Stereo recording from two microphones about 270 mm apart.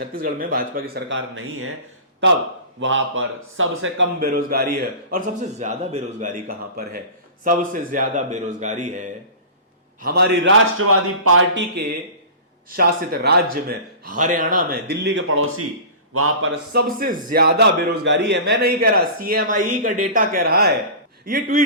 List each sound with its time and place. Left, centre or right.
0.0 s a man's voice: right
16.7 s a man's voice: right